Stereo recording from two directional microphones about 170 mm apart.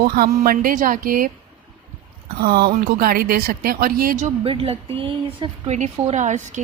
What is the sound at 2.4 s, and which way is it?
Speech, 60° right (ahead or behind).